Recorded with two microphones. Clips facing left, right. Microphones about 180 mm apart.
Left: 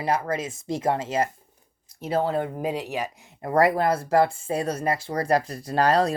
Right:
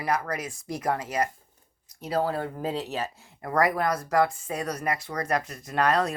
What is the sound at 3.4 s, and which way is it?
Speech, 25° left (ahead or behind).